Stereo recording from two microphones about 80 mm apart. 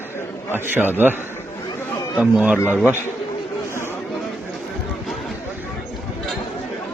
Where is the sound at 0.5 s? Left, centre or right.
Right.